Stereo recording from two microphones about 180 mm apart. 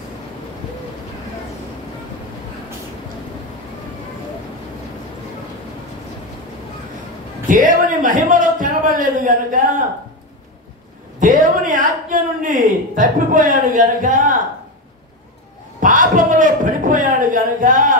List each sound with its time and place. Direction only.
7.4 s a man's voice: 45° right (ahead or behind)
11.1 s a man's voice: 45° right (ahead or behind)
15.8 s a man's voice: 45° right (ahead or behind)